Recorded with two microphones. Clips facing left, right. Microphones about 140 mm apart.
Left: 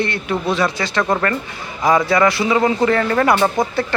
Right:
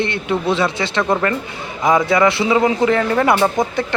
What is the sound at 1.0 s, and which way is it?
A man's voice, 10° right (ahead or behind).